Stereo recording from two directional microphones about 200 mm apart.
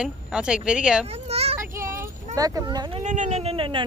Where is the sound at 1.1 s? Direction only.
30° right (ahead or behind).